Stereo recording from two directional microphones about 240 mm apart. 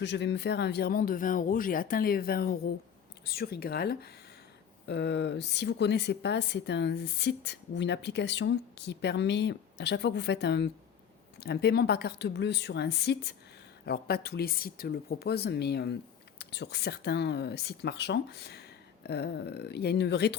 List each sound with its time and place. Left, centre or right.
0.0 s speech: left